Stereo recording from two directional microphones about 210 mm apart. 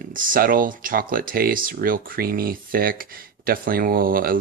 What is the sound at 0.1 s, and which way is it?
Speech, 40° right (ahead or behind).